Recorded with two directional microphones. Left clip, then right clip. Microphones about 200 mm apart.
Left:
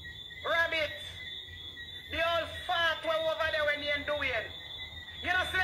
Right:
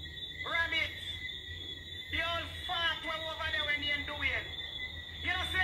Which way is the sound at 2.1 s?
45° left (ahead or behind).